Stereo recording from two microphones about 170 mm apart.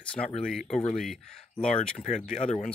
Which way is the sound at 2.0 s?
40° left (ahead or behind).